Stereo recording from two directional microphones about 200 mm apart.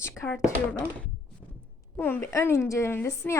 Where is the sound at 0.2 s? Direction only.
15° left (ahead or behind).